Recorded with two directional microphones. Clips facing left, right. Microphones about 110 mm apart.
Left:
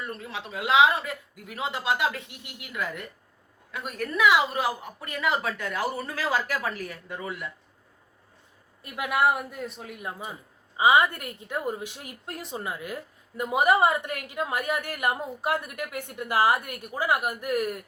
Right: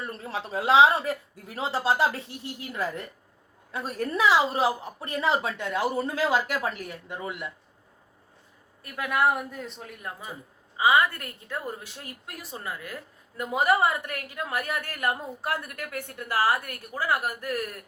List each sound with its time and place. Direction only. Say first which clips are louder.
0.0 s a woman's voice: right 2 dB; 35° right (ahead or behind)
8.8 s a woman's voice: left 1 dB; 10° left (ahead or behind)
10.8 s a woman's voice: left 1 dB; 20° left (ahead or behind)